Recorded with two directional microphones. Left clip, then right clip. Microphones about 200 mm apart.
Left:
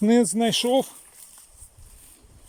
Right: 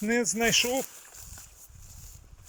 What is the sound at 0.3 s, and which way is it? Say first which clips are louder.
Speech: left 4 dB; 35° left (ahead or behind).